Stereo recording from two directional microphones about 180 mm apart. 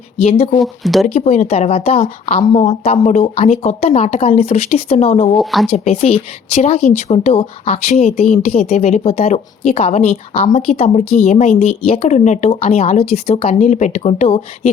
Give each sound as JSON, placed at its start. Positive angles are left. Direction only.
{"t": 0.2, "sound": "speech", "side_deg": 35}
{"t": 0.6, "sound": "speech", "side_deg": 0}
{"t": 1.0, "sound": "speech", "side_deg": 35}
{"t": 5.4, "sound": "speech", "side_deg": 0}
{"t": 5.6, "sound": "speech", "side_deg": 35}